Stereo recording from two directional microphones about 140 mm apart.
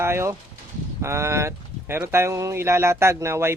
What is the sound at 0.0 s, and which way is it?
Speech, 20° right (ahead or behind).